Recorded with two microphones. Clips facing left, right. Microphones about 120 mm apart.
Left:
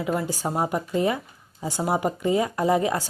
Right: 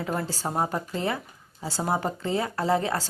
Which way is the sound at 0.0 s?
Centre (ahead or behind).